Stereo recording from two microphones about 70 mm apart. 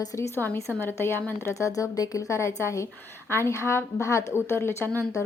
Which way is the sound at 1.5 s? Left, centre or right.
Left.